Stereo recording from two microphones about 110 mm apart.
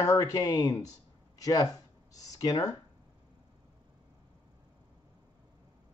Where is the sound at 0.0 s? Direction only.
30° left (ahead or behind).